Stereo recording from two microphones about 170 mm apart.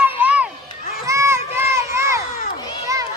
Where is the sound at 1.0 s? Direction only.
15° right (ahead or behind).